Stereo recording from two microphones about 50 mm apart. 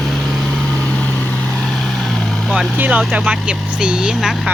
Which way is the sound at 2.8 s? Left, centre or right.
Right.